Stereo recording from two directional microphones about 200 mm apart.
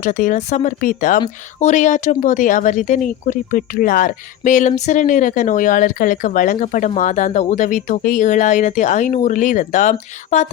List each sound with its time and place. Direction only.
0.0 s speech: 40° left (ahead or behind)